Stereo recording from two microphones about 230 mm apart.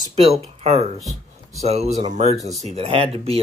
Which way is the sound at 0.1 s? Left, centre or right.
Right.